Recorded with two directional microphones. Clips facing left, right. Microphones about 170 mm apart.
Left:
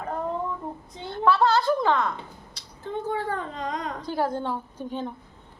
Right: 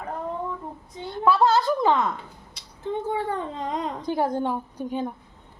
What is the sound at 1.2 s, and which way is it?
A woman's voice, 20° right (ahead or behind).